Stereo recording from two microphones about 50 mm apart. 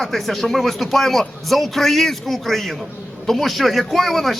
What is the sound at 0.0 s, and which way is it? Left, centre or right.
A man's voice, centre.